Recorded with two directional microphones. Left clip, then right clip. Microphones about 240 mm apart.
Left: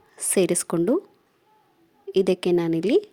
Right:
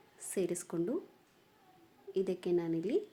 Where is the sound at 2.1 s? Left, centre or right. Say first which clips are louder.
Left 13 dB; left.